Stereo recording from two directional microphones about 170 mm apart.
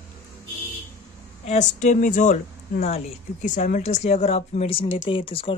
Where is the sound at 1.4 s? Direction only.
45° left (ahead or behind).